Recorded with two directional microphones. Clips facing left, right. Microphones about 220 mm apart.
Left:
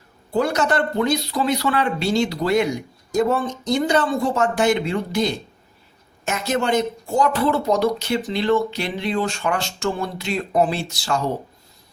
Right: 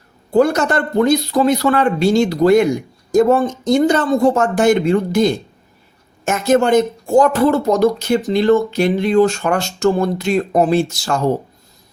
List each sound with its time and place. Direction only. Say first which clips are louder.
0.3 s speech: right 6 dB; 45° right (ahead or behind)